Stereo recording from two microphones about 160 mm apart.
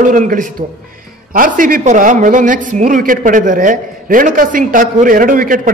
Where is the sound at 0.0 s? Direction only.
55° right (ahead or behind).